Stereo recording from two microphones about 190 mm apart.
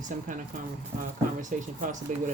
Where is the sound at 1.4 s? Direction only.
40° right (ahead or behind).